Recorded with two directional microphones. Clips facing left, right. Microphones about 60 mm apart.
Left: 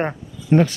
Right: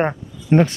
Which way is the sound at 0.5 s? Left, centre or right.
Right.